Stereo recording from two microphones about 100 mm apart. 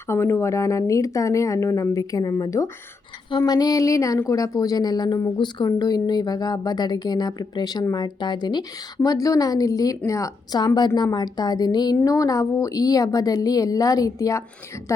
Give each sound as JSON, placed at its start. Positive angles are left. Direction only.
{"t": 0.1, "sound": "speech", "side_deg": 25}
{"t": 3.2, "sound": "a woman's voice", "side_deg": 45}
{"t": 9.0, "sound": "a woman's voice", "side_deg": 35}
{"t": 12.0, "sound": "speech", "side_deg": 35}